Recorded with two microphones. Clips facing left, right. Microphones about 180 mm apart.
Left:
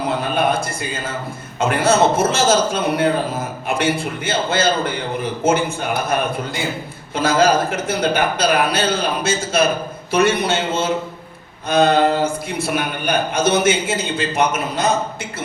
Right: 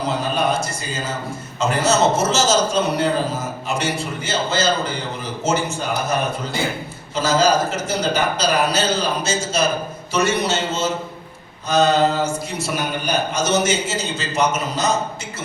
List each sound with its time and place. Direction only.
0.3 s a sound: 55° left (ahead or behind)
1.5 s a man's voice: 55° left (ahead or behind)
7.2 s a man's voice: 55° left (ahead or behind)